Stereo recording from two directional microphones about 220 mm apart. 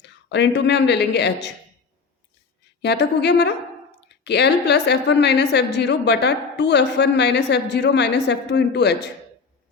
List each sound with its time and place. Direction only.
0.0 s speech: 50° left (ahead or behind)
2.8 s a woman's voice: 50° left (ahead or behind)